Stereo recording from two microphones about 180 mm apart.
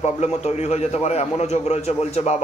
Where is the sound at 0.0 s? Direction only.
35° left (ahead or behind).